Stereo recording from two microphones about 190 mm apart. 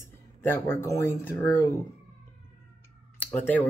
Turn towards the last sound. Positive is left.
turn(degrees=10)  # may be behind; listen again after turning